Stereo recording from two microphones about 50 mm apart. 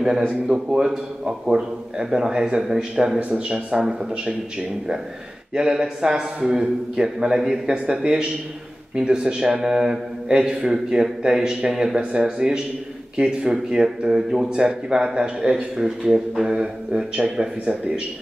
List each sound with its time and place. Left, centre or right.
0.3 s a man's voice: centre
3.2 s a man's voice: right; by 16.5 s centre
16.5 s a man's voice: centre